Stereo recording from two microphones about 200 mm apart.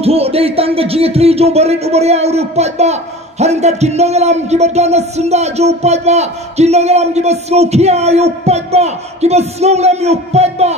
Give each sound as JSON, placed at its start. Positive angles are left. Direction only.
{"t": 0.0, "sound": "a man's voice", "side_deg": -30}